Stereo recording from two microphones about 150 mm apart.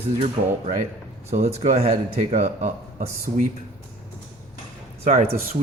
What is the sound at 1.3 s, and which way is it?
Speech, 45° right (ahead or behind).